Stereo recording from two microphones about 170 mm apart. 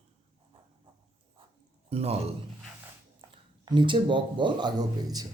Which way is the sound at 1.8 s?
35° right (ahead or behind).